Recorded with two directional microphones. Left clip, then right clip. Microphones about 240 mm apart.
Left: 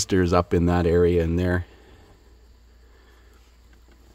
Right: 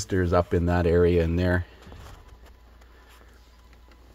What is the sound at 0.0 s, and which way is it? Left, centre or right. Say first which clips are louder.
Speech: left 3 dB; left.